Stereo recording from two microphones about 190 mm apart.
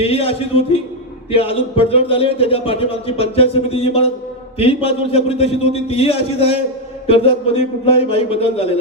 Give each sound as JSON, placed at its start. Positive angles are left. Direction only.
{"t": 0.0, "sound": "a man's voice", "side_deg": 30}